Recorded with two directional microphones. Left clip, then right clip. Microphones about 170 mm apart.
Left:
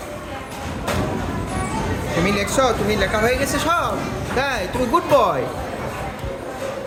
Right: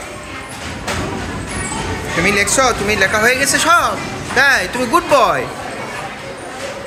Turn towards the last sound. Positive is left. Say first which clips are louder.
# right 4 dB
turn(degrees=0)  # may be behind; listen again after turning